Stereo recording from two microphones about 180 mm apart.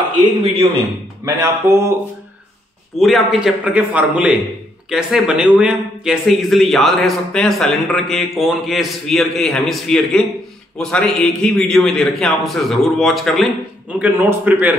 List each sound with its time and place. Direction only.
1.2 s speech: 20° right (ahead or behind)
3.0 s a man's voice: centre (ahead or behind)